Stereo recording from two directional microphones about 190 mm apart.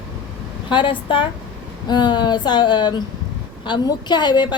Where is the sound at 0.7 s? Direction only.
25° left (ahead or behind).